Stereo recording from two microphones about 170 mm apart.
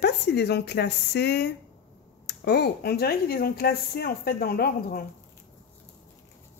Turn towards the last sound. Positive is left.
turn(degrees=65)  # may be behind; listen again after turning